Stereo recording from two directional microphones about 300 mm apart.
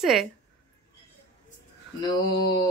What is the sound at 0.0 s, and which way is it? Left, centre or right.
Speech, centre.